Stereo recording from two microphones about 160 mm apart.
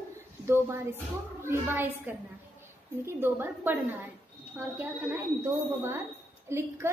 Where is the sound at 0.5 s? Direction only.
15° right (ahead or behind).